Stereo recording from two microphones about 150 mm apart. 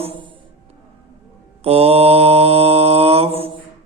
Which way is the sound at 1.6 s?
40° right (ahead or behind).